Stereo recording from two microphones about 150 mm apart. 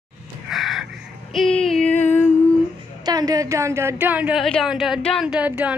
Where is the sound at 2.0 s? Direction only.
15° left (ahead or behind).